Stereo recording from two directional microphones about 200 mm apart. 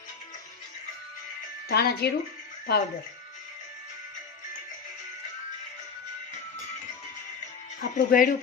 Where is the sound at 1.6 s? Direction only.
50° left (ahead or behind).